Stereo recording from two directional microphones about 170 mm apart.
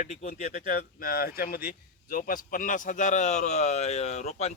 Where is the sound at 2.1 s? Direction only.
55° left (ahead or behind).